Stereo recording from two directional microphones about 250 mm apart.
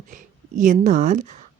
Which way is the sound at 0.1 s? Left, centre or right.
Right.